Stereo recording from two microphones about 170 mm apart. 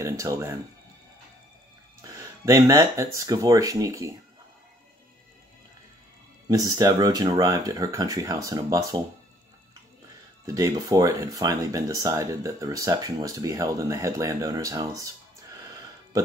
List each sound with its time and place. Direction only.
0.0 s speech: 20° right (ahead or behind)
2.0 s speech: 20° right (ahead or behind)
6.5 s speech: 20° right (ahead or behind)
10.4 s speech: 20° right (ahead or behind)